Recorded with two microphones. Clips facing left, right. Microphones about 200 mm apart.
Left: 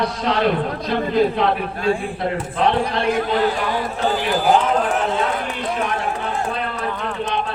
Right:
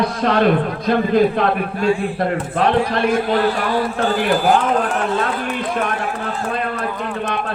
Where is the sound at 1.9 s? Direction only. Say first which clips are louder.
Right 2 dB; 50° left (ahead or behind).